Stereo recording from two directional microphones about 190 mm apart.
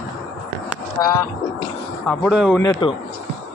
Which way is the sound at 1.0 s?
15° left (ahead or behind).